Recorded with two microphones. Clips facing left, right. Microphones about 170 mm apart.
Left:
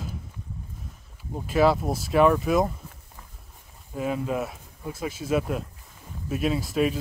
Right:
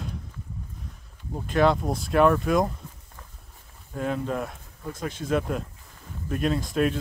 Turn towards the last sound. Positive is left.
turn(degrees=5)  # may be behind; listen again after turning